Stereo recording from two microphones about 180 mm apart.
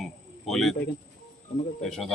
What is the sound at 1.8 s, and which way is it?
Speech, centre (ahead or behind).